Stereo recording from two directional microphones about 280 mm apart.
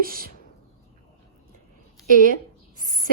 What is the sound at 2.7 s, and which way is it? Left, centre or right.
Speech, right.